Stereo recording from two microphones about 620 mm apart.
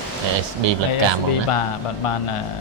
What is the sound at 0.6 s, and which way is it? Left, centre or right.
Speech, right.